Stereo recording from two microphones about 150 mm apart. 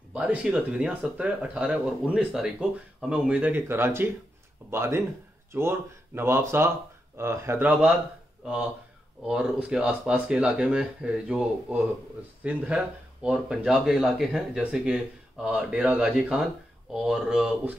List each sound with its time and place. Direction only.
0.1 s speech: 10° right (ahead or behind)
9.2 s speech: 5° right (ahead or behind)